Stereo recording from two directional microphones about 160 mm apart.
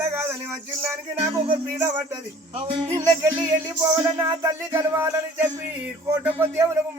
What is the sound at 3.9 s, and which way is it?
Speech, 20° right (ahead or behind).